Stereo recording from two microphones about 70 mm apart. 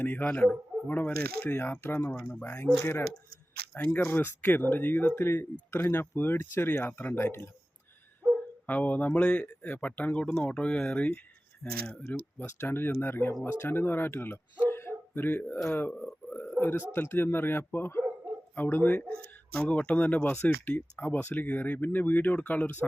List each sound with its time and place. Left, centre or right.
0.0 s speech: left
3.9 s speech: left
8.6 s speech: left
12.5 s speech: left